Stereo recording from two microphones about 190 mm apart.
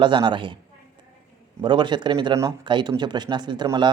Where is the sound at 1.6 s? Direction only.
25° right (ahead or behind).